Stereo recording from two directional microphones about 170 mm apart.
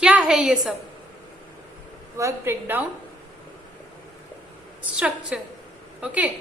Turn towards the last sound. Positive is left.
turn(degrees=-10)  # may be behind; listen again after turning